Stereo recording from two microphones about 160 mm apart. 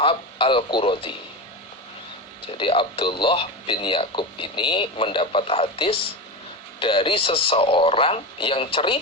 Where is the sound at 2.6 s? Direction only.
35° left (ahead or behind).